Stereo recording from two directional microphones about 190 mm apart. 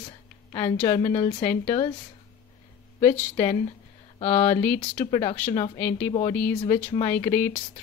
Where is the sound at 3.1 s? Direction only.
10° left (ahead or behind).